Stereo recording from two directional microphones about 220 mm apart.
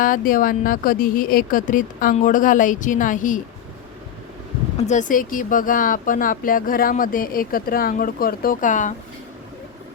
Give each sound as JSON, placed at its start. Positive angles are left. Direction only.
{"t": 0.0, "sound": "speech", "side_deg": 40}
{"t": 4.8, "sound": "speech", "side_deg": 35}